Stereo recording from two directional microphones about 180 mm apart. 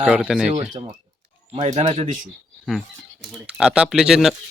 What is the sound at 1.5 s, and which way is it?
Speech, 35° right (ahead or behind).